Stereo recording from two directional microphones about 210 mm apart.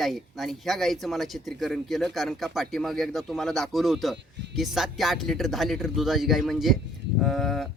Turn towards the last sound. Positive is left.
turn(degrees=0)  # may be behind; listen again after turning